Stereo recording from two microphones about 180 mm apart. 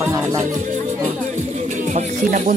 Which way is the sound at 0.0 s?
15° right (ahead or behind).